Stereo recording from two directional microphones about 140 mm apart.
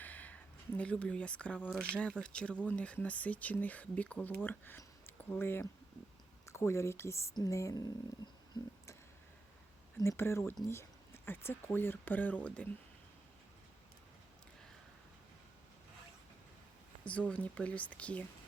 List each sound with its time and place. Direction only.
0.0 s speech: 10° left (ahead or behind)
10.0 s speech: 20° left (ahead or behind)
17.0 s speech: 10° left (ahead or behind)